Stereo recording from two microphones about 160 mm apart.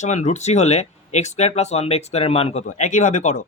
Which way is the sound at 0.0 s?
45° left (ahead or behind).